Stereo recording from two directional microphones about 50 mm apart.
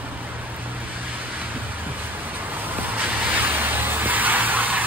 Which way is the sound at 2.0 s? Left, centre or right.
Right.